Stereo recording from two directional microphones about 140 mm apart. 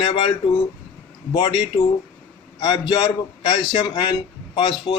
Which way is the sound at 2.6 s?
30° left (ahead or behind).